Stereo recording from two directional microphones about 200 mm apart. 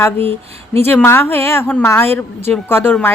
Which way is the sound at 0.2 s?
30° right (ahead or behind).